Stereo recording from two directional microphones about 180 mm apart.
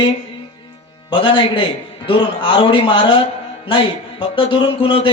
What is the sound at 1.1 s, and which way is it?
A man's voice, 25° left (ahead or behind).